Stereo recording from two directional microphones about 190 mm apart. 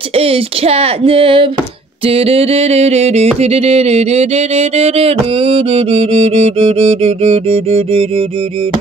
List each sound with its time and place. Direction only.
0.1 s speech: 30° right (ahead or behind)
2.0 s music: 30° right (ahead or behind)